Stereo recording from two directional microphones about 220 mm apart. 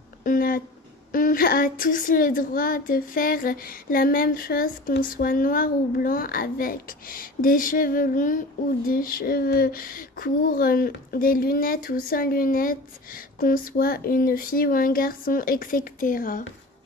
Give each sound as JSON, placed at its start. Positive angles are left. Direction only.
{"t": 0.2, "sound": "speech", "side_deg": 40}